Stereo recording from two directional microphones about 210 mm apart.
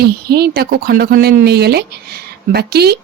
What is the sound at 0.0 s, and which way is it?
Speech, 50° right (ahead or behind).